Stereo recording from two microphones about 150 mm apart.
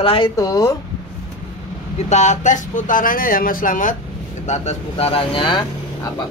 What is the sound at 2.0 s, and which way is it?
Speech, 50° left (ahead or behind).